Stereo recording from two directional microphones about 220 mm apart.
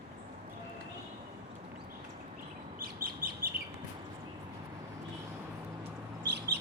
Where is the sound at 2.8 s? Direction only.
40° right (ahead or behind).